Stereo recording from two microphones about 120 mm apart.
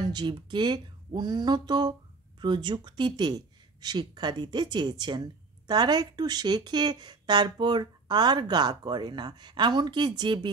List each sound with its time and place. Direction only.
0.0 s speech: 35° right (ahead or behind)